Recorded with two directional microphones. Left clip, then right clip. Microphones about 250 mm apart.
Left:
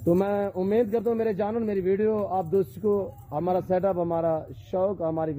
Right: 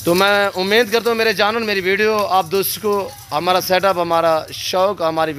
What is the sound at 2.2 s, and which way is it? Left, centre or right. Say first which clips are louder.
Speech: right 9 dB; right.